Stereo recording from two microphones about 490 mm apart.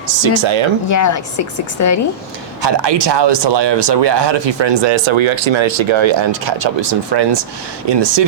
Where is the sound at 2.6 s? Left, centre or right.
Right.